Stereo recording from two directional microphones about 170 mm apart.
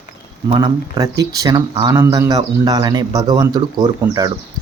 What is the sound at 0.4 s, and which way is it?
A man's voice, 25° right (ahead or behind).